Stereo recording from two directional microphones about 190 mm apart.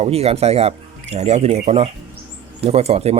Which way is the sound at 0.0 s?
30° right (ahead or behind).